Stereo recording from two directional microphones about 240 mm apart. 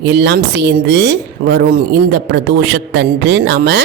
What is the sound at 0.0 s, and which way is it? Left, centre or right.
Speech, right.